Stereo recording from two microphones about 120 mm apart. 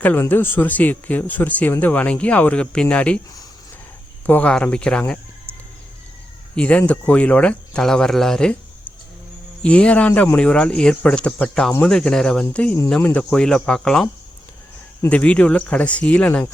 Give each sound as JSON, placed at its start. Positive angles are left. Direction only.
{"t": 0.0, "sound": "speech", "side_deg": 15}
{"t": 4.3, "sound": "speech", "side_deg": 10}
{"t": 6.6, "sound": "speech", "side_deg": 10}
{"t": 9.6, "sound": "speech", "side_deg": 10}
{"t": 13.3, "sound": "speech", "side_deg": 5}
{"t": 15.1, "sound": "speech", "side_deg": 10}